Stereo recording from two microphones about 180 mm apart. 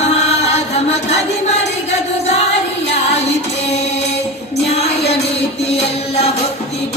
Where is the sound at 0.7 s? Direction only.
35° left (ahead or behind).